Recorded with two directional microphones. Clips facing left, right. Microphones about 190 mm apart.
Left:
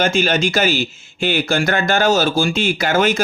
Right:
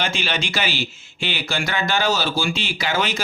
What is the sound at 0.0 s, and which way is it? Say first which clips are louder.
Speech: left 9 dB; 45° left (ahead or behind).